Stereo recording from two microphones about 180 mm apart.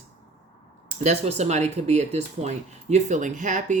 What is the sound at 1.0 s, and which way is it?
Speech, 40° right (ahead or behind).